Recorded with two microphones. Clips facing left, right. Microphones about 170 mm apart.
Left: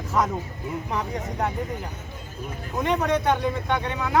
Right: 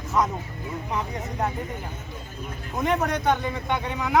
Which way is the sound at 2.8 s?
5° right (ahead or behind).